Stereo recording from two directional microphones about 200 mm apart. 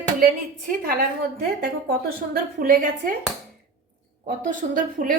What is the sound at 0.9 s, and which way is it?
Speech, 50° right (ahead or behind).